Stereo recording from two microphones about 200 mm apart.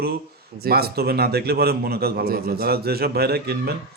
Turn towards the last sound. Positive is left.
turn(degrees=-50)  # may be behind; listen again after turning